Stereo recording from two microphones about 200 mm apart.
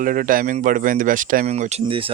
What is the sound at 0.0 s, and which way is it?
Speech, 45° right (ahead or behind).